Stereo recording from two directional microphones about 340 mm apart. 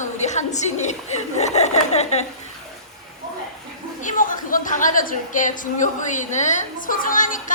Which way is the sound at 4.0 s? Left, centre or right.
Left.